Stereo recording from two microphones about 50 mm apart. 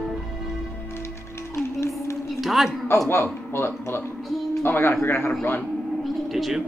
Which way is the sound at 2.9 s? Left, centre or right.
Left.